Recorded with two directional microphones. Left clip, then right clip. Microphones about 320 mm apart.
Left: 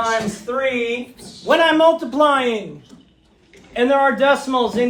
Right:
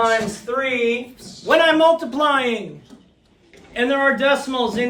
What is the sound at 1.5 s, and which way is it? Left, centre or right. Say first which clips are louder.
A man's voice: even; centre.